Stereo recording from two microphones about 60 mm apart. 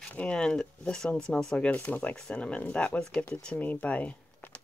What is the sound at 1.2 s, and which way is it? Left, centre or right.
Speech, centre.